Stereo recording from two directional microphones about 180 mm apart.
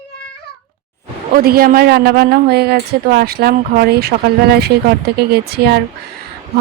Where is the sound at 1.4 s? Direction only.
55° right (ahead or behind).